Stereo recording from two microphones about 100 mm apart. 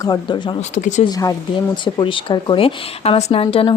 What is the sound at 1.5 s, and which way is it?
Speech, 50° left (ahead or behind).